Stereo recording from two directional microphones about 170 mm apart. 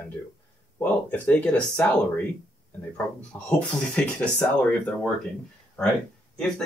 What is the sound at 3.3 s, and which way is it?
Speech, 5° left (ahead or behind).